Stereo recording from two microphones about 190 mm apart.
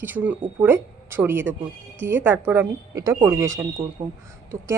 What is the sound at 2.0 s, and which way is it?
Speech, 70° right (ahead or behind).